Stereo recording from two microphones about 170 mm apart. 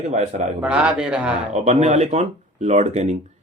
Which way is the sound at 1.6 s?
40° right (ahead or behind).